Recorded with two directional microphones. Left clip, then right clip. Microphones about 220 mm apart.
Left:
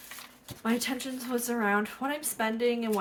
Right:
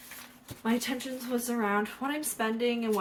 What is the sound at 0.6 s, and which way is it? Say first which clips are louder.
Speech: left 1 dB; 35° left (ahead or behind).